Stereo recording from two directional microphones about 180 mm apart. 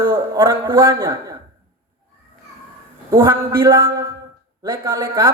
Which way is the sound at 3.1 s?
15° right (ahead or behind).